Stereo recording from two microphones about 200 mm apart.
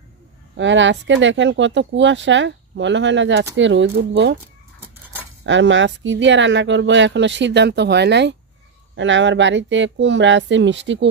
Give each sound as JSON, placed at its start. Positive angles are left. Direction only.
{"t": 0.6, "sound": "speech", "side_deg": -65}
{"t": 5.4, "sound": "speech", "side_deg": -65}